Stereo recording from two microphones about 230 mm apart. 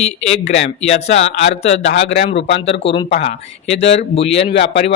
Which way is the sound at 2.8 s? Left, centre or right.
Left.